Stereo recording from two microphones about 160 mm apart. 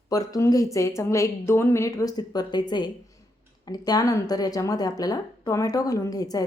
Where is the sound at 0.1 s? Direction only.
20° left (ahead or behind).